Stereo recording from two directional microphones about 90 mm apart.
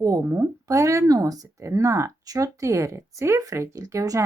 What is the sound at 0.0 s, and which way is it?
Speech, 40° right (ahead or behind).